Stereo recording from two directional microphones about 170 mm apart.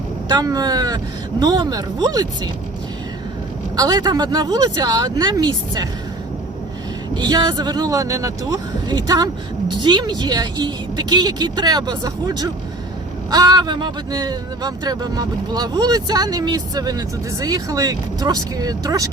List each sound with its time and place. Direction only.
0.3 s speech: 20° right (ahead or behind)
3.8 s speech: 25° right (ahead or behind)
7.2 s speech: 25° right (ahead or behind)